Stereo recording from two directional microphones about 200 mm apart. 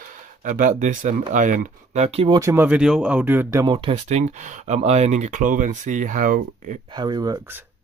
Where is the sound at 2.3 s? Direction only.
10° right (ahead or behind); by 6.8 s 40° right (ahead or behind).